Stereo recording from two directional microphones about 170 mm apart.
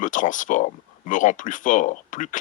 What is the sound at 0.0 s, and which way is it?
Speech, 50° left (ahead or behind).